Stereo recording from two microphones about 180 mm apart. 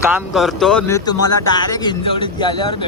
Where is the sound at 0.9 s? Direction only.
20° left (ahead or behind).